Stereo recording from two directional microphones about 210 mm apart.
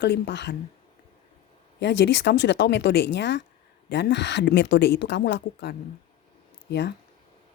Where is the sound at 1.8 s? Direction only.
55° left (ahead or behind).